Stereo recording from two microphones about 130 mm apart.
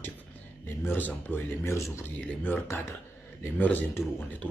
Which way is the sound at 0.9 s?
15° left (ahead or behind).